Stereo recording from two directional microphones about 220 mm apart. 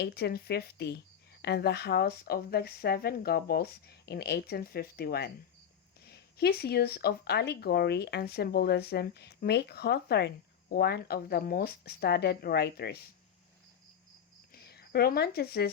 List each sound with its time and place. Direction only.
0.0 s speech: 45° left (ahead or behind)
14.5 s speech: 45° left (ahead or behind)